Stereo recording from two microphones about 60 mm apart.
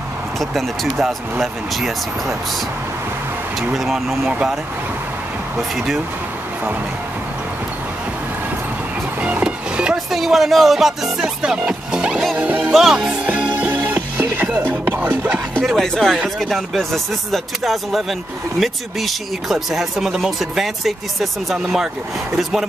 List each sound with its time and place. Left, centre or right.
0.4 s speech: centre
3.7 s speech: centre
5.6 s speech: centre
9.2 s music: centre
10.1 s speech: centre
11.1 s music: centre
12.4 s music: right
12.9 s speech: centre
13.3 s music: right
15.6 s speech: centre